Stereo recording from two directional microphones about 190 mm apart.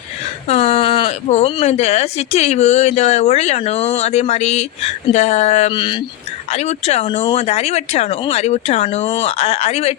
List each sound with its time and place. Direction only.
0.4 s speech: 35° left (ahead or behind)
6.5 s speech: 35° left (ahead or behind)